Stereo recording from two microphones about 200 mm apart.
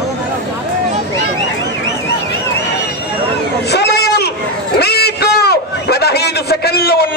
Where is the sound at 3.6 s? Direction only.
55° left (ahead or behind).